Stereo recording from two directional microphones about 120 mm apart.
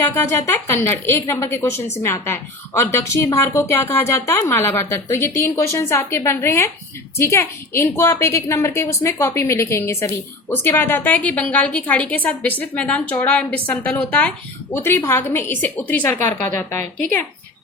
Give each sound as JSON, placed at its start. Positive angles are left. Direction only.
{"t": 0.0, "sound": "a woman's voice", "side_deg": 25}